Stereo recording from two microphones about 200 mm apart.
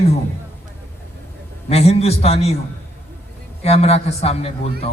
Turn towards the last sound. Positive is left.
turn(degrees=30)  # may be behind; listen again after turning